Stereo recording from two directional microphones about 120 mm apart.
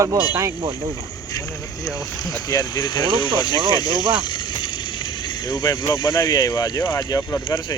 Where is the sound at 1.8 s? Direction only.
30° left (ahead or behind).